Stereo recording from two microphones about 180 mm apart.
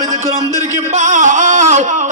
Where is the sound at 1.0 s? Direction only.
45° right (ahead or behind).